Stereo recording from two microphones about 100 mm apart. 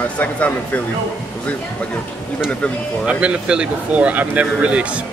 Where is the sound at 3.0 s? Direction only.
10° right (ahead or behind).